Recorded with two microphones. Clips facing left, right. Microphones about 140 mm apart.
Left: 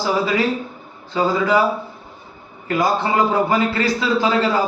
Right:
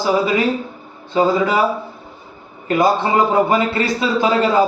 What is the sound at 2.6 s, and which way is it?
A man's voice, 25° right (ahead or behind).